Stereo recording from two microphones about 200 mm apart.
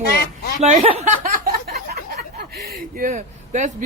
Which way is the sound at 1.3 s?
50° right (ahead or behind).